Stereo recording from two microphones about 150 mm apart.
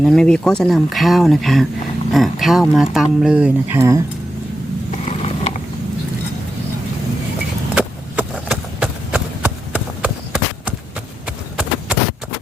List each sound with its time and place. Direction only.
0.0 s speech: 5° left (ahead or behind); by 4.0 s 20° right (ahead or behind)
4.9 s mechanisms: 45° left (ahead or behind)
7.8 s a sound: 5° right (ahead or behind)
11.3 s clip-clop: 10° right (ahead or behind)